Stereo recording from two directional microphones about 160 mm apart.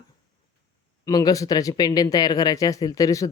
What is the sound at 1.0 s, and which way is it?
Speech, 20° left (ahead or behind).